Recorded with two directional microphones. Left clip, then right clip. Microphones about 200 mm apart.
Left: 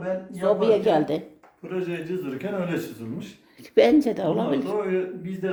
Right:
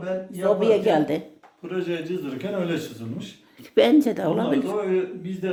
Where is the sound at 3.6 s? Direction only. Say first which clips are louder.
Even; centre (ahead or behind).